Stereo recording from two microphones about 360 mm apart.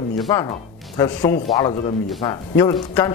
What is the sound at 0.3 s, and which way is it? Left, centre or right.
Speech, centre.